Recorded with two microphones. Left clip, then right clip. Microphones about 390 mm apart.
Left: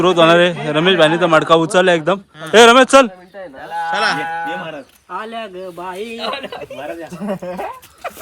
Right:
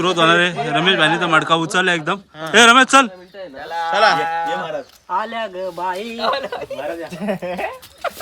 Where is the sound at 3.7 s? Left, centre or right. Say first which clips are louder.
Right 2 dB; centre.